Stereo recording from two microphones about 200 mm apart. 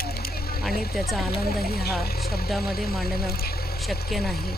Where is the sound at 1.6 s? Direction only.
50° left (ahead or behind).